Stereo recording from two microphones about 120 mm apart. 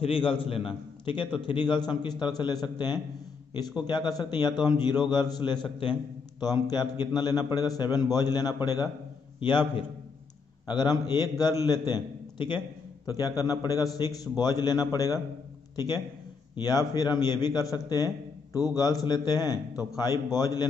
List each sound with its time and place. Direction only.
0.0 s a man's voice: 50° left (ahead or behind); by 20.6 s 30° left (ahead or behind)